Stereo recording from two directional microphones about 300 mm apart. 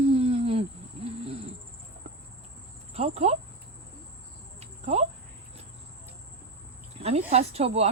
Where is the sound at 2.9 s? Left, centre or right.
Right.